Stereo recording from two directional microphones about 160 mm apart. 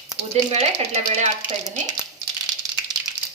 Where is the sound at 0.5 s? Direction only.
45° right (ahead or behind).